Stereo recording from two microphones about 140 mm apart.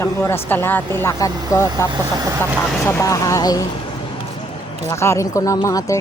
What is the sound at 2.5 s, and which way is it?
Speech, 5° left (ahead or behind).